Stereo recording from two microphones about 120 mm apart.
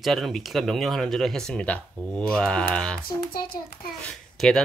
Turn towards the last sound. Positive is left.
turn(degrees=5)  # may be behind; listen again after turning